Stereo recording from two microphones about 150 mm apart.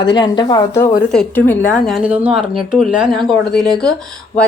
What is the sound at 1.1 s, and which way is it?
Speech, 10° left (ahead or behind).